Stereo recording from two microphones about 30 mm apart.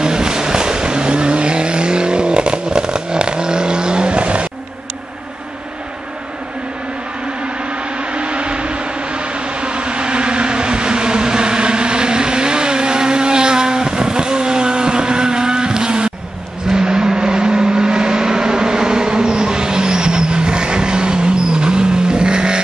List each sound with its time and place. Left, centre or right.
0.0 s vehicle: right
7.4 s vehicle: right